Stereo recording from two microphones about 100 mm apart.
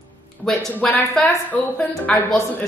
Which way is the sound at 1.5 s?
15° left (ahead or behind).